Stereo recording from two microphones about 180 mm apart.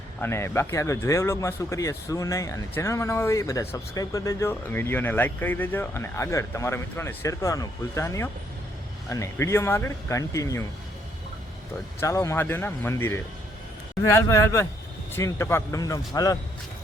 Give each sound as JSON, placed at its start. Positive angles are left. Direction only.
{"t": 0.2, "sound": "a man's voice", "side_deg": 15}
{"t": 11.9, "sound": "a man's voice", "side_deg": 15}